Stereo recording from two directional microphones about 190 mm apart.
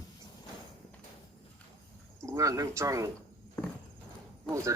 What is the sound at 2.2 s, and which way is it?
Speech, 15° right (ahead or behind).